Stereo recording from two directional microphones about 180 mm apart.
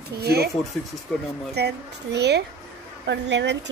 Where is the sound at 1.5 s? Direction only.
65° right (ahead or behind).